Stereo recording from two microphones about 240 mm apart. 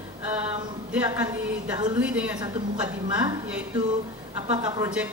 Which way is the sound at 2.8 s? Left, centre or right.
Centre.